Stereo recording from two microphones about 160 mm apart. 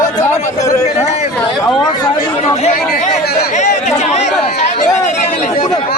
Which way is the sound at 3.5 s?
45° left (ahead or behind).